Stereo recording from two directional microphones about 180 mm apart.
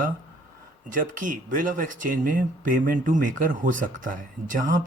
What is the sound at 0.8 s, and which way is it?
Speech, 45° right (ahead or behind).